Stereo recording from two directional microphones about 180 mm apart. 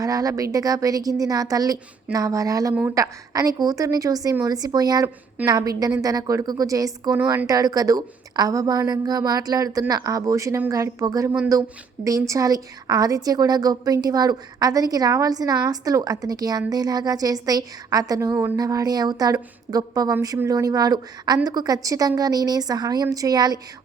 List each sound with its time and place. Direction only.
0.0 s a woman's voice: 20° right (ahead or behind)